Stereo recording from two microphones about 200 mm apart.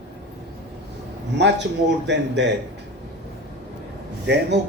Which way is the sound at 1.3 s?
60° right (ahead or behind).